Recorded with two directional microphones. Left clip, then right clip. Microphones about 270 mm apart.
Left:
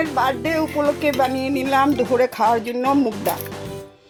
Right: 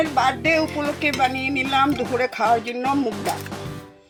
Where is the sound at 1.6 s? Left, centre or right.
Left.